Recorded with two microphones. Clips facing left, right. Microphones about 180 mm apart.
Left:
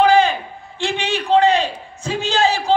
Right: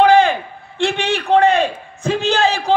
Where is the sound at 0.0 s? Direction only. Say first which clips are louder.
Right 2 dB; 55° right (ahead or behind).